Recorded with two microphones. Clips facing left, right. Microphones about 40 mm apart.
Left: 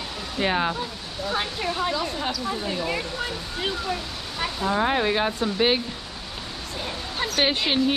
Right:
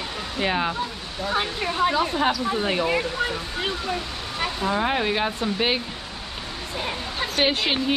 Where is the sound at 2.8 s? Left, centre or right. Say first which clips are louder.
Right 4 dB; centre.